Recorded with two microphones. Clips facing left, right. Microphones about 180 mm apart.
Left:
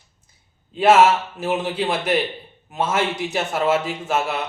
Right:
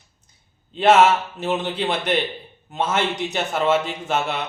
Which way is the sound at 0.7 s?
5° left (ahead or behind).